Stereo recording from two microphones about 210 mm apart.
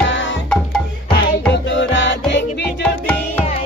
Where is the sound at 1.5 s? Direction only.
60° left (ahead or behind).